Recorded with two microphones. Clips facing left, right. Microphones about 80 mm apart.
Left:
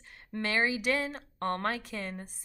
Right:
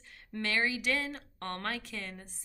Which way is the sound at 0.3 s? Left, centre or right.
Centre.